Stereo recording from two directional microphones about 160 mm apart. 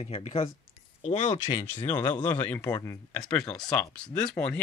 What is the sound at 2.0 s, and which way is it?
Speech, 25° left (ahead or behind).